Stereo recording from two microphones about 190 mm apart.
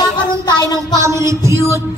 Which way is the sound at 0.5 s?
20° left (ahead or behind).